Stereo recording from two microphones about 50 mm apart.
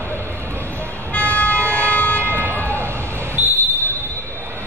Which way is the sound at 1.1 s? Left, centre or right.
Left.